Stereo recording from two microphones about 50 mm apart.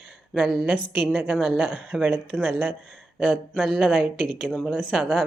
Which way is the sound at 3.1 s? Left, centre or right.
Right.